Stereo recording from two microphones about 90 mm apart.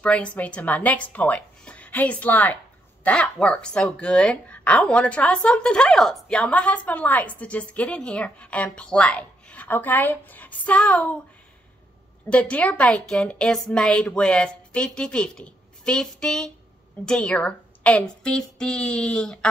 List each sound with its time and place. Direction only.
0.0 s speech: 15° left (ahead or behind)
12.3 s a woman's voice: 15° left (ahead or behind)